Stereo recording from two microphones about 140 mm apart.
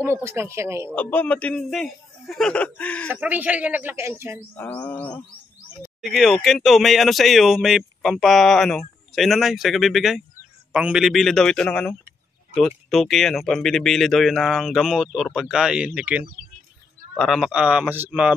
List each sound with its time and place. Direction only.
0.0 s speech: 20° right (ahead or behind)
0.9 s a man's voice: 10° left (ahead or behind)
3.1 s a woman's voice: 10° right (ahead or behind)
4.6 s a man's voice: 10° left (ahead or behind)
6.1 s a woman's voice: centre (ahead or behind)